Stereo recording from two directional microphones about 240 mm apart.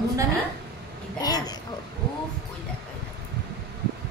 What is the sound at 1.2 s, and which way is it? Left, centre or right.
Speech, centre.